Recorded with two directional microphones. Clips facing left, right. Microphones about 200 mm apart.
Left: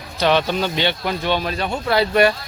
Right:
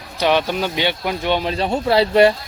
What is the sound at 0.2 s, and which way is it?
Speech, 10° right (ahead or behind).